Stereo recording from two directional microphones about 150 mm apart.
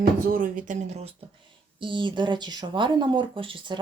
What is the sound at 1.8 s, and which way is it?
Speech, 35° right (ahead or behind).